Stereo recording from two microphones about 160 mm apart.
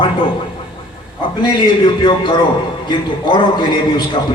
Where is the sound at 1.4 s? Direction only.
30° left (ahead or behind).